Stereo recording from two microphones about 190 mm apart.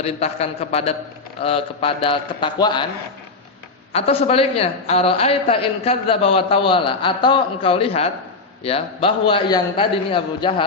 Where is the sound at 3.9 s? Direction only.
30° left (ahead or behind).